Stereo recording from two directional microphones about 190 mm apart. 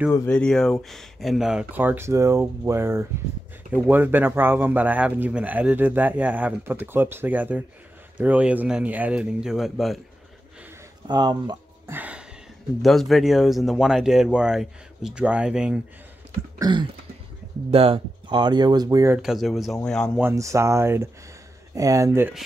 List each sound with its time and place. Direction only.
0.1 s speech: 10° left (ahead or behind)
11.1 s speech: 20° right (ahead or behind)
11.9 s a sound: 5° right (ahead or behind)
12.8 s speech: centre (ahead or behind)
16.5 s throat clearing: 20° right (ahead or behind)
17.6 s speech: 30° right (ahead or behind)
19.2 s speech: centre (ahead or behind)
20.2 s speech: 15° right (ahead or behind)